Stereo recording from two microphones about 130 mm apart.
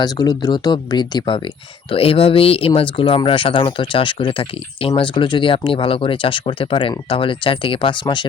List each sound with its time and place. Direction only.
0.0 s speech: 30° left (ahead or behind)
1.9 s speech: 45° left (ahead or behind)